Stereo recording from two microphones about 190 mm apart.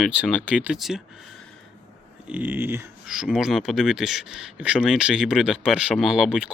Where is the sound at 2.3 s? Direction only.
10° right (ahead or behind).